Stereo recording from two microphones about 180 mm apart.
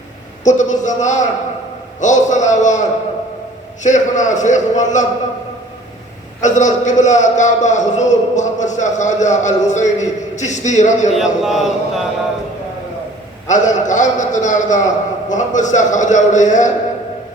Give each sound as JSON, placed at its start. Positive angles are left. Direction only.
{"t": 0.4, "sound": "a man's voice", "side_deg": 45}
{"t": 3.8, "sound": "a man's voice", "side_deg": 40}
{"t": 6.4, "sound": "a man's voice", "side_deg": 40}
{"t": 11.1, "sound": "speech", "side_deg": 0}
{"t": 13.5, "sound": "a man's voice", "side_deg": 45}